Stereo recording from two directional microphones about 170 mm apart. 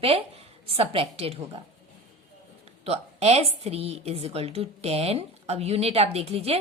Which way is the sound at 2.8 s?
40° right (ahead or behind).